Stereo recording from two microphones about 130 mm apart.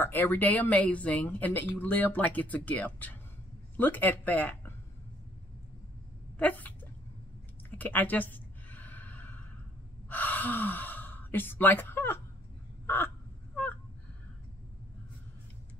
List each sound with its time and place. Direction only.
0.0 s speech: 15° left (ahead or behind)
6.3 s a sound: 15° left (ahead or behind)
7.7 s sigh: 15° left (ahead or behind)
10.0 s speech: 15° left (ahead or behind)
12.8 s crow: 15° left (ahead or behind)